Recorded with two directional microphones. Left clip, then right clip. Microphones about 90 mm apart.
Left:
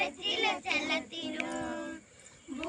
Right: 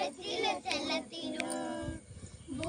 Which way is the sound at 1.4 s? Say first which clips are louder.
Even; 15° right (ahead or behind).